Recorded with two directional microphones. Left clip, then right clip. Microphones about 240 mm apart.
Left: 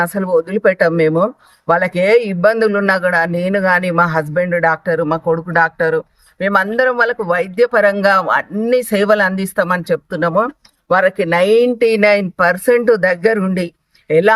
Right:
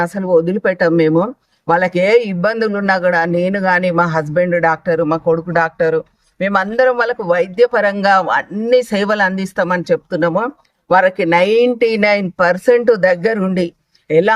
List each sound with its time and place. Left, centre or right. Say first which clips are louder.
0.0 s a man's voice: right 1 dB; centre